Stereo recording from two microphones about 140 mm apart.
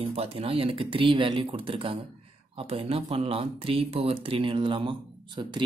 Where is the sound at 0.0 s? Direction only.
45° right (ahead or behind).